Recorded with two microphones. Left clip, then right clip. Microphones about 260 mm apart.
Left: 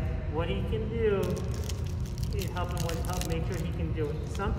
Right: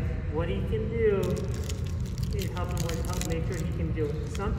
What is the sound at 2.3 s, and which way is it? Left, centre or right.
Speech, left.